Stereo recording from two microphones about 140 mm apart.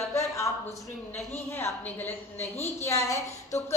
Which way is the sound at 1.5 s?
15° left (ahead or behind).